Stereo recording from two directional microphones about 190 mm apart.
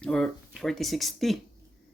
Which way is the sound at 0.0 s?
5° left (ahead or behind).